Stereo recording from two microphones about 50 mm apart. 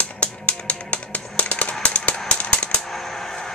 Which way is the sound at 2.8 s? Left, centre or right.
Centre.